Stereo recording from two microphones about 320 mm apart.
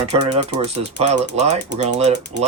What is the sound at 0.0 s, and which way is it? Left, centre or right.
Speech, centre.